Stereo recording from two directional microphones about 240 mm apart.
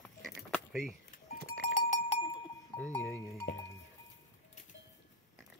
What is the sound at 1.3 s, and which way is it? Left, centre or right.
Goat, left.